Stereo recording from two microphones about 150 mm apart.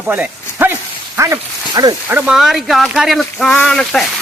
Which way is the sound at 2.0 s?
10° right (ahead or behind).